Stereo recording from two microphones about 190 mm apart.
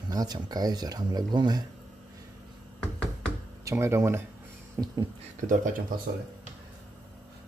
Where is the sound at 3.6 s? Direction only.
15° right (ahead or behind).